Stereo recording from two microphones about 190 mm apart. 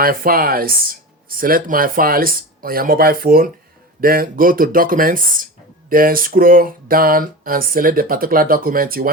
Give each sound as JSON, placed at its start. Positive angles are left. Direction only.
{"t": 0.0, "sound": "speech", "side_deg": -50}